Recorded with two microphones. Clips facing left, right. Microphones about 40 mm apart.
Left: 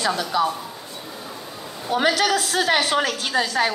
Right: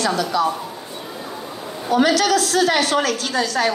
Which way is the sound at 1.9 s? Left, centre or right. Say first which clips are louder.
Right 3 dB; centre.